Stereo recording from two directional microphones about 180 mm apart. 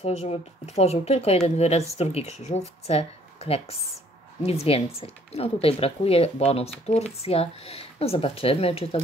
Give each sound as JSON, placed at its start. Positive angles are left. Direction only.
{"t": 0.0, "sound": "speech", "side_deg": 35}